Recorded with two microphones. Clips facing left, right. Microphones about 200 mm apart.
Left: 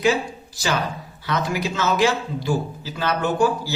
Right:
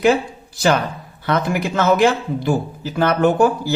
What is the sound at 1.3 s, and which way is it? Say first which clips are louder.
A man's voice: right 4 dB; 55° right (ahead or behind).